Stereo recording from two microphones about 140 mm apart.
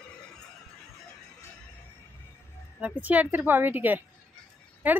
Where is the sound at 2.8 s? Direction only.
10° right (ahead or behind).